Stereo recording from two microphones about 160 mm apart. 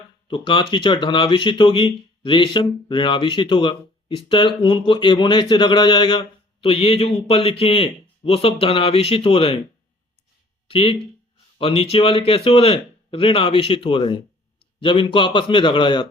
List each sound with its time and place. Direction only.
0.3 s speech: 30° left (ahead or behind)
10.7 s a man's voice: 35° left (ahead or behind)